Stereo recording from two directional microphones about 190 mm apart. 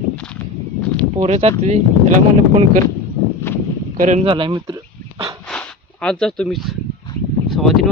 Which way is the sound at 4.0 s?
35° right (ahead or behind).